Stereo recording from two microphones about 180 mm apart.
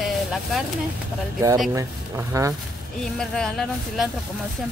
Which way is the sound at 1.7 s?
15° right (ahead or behind).